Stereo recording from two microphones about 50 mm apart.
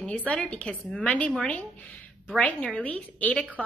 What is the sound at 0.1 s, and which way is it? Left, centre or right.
A woman's voice, left.